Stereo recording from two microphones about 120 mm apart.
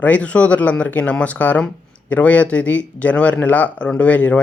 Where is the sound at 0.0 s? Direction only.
10° left (ahead or behind).